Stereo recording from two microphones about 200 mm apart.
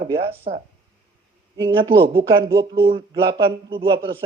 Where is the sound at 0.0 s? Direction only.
30° right (ahead or behind).